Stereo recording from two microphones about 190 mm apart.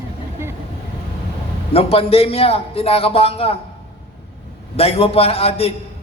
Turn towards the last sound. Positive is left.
turn(degrees=30)  # may be behind; listen again after turning